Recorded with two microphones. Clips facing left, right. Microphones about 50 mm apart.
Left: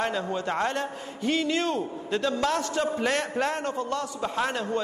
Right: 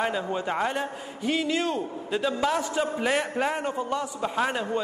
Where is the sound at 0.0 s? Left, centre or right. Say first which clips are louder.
Right 1 dB; centre.